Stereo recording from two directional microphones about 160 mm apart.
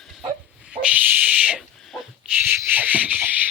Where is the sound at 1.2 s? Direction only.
10° right (ahead or behind).